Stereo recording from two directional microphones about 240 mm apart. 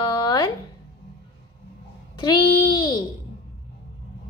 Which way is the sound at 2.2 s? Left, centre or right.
Centre.